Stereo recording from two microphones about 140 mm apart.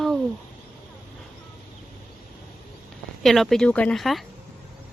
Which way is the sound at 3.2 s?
Centre (ahead or behind).